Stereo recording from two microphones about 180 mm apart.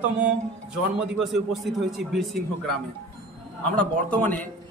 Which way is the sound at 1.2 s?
Centre (ahead or behind).